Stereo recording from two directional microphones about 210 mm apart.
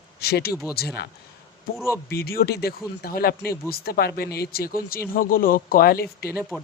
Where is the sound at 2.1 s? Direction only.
45° left (ahead or behind).